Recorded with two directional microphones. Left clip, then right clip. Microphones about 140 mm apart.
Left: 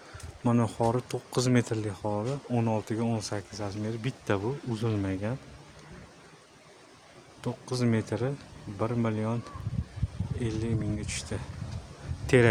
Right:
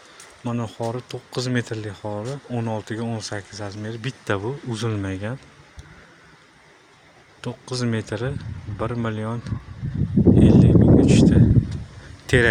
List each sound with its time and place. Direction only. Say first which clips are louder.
0.4 s speech: left 1 dB; 35° left (ahead or behind); by 5.4 s 15° right (ahead or behind)
7.4 s speech: right 3 dB; 5° right (ahead or behind)
10.4 s speech: right 12 dB; centre (ahead or behind)
12.2 s a sound: right 4 dB; 10° left (ahead or behind)